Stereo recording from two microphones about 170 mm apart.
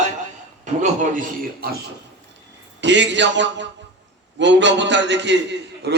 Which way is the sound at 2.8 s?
90° right.